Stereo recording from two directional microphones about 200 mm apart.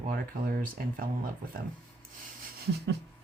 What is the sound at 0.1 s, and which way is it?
Speech, 45° right (ahead or behind).